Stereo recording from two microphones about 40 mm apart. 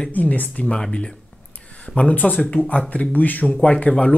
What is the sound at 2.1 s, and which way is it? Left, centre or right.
Speech, left.